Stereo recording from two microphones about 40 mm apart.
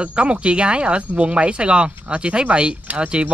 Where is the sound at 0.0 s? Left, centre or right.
Right.